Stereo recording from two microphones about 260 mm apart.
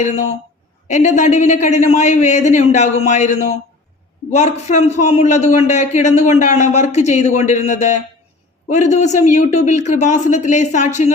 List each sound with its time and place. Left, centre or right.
0.9 s a man's voice: left